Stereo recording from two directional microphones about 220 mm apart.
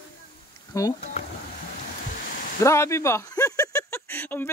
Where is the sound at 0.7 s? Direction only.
15° left (ahead or behind).